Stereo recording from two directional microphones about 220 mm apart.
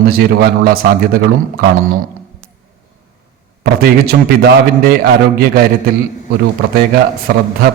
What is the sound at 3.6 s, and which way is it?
A man's voice, 45° right (ahead or behind).